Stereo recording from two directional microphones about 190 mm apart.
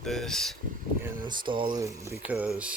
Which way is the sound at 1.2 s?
25° right (ahead or behind).